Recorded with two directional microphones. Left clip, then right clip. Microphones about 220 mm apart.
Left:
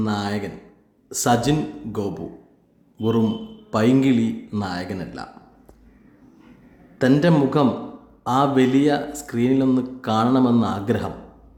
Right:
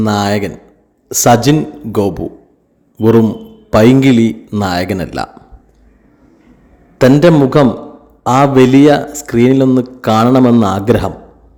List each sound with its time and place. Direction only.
0.0 s a man's voice: 35° right (ahead or behind)
7.0 s a man's voice: 35° right (ahead or behind)